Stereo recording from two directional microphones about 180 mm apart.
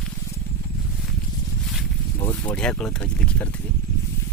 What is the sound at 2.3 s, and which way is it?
Speech, 5° left (ahead or behind).